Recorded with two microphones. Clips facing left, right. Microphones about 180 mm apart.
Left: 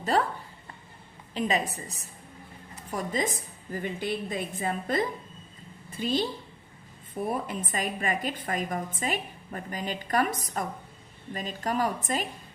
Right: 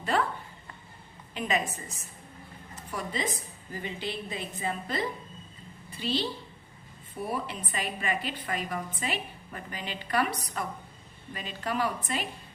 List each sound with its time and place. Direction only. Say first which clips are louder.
0.0 s speech: left 2 dB; 40° left (ahead or behind)
1.3 s a woman's voice: left 2 dB; 35° left (ahead or behind)
7.4 s a woman's voice: left 3 dB; 45° left (ahead or behind)